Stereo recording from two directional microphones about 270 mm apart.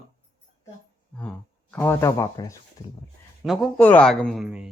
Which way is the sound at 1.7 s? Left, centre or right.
Centre.